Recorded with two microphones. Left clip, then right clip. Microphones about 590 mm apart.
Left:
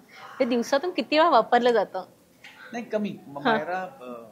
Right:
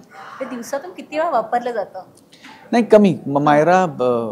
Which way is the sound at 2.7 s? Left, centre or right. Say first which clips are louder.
Right 18 dB; right.